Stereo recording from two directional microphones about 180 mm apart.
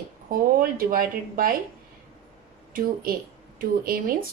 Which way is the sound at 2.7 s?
55° right (ahead or behind).